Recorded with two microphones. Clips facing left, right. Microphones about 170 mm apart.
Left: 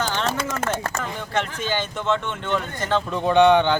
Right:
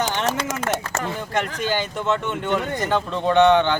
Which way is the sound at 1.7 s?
10° right (ahead or behind).